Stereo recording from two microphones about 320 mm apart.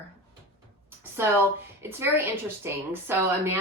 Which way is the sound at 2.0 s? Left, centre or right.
Centre.